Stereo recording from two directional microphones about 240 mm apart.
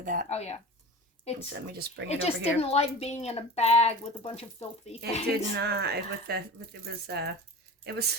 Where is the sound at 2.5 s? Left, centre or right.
Left.